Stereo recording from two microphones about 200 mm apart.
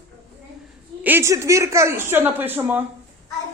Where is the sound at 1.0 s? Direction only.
10° right (ahead or behind).